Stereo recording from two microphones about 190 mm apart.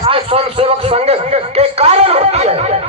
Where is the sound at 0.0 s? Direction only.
30° right (ahead or behind).